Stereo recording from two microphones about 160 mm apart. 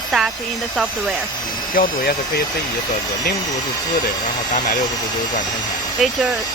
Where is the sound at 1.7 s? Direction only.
65° left (ahead or behind).